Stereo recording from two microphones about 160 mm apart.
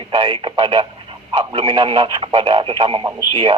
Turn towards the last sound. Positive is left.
turn(degrees=-35)  # may be behind; listen again after turning